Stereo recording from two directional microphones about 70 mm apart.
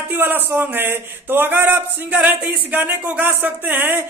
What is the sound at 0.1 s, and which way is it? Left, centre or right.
Speech, right.